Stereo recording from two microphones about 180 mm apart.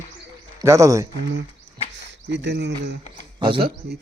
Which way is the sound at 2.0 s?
75° right (ahead or behind).